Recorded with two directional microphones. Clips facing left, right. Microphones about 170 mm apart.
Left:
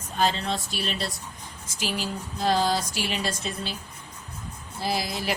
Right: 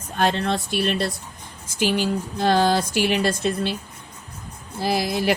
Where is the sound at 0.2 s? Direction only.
60° right (ahead or behind).